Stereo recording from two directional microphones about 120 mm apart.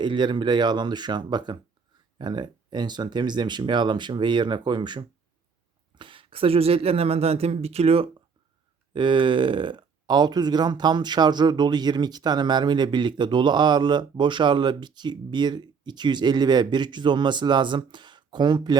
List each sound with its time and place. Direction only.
0.0 s speech: 40° right (ahead or behind); by 8.1 s 55° right (ahead or behind)
8.9 s speech: 40° right (ahead or behind)